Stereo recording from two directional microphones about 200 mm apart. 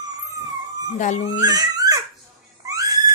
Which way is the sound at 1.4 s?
20° right (ahead or behind).